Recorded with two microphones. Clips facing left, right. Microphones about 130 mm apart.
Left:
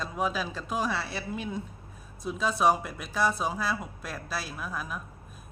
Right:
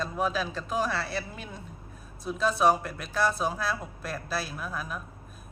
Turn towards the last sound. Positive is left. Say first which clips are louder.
# even
turn(degrees=0)  # may be behind; listen again after turning